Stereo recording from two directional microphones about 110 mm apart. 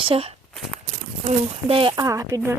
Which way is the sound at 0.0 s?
60° right (ahead or behind).